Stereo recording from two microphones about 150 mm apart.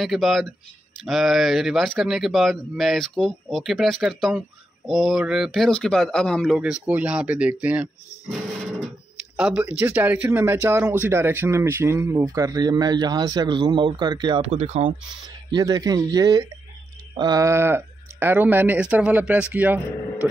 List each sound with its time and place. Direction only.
0.0 s speech: centre (ahead or behind); by 14.4 s 30° right (ahead or behind)
14.4 s speech: 45° right (ahead or behind)
15.2 s speech: 25° right (ahead or behind)